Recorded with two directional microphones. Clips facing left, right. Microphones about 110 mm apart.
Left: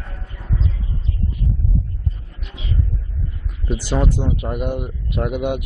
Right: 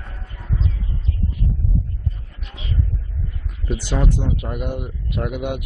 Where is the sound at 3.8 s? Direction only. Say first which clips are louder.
Left 3 dB; 35° left (ahead or behind).